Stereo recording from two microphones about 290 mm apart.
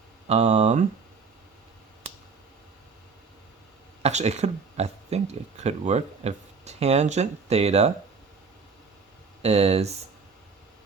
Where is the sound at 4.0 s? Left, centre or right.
Right.